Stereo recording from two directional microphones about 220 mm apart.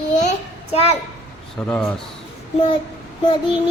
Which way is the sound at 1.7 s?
5° left (ahead or behind).